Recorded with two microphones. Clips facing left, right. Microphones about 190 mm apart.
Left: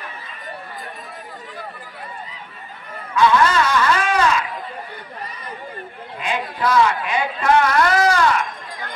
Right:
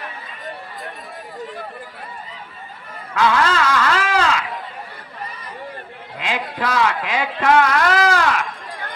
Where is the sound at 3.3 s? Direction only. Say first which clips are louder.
Left 2 dB; 90° right.